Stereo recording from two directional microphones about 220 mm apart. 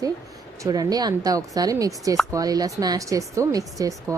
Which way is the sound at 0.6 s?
15° right (ahead or behind).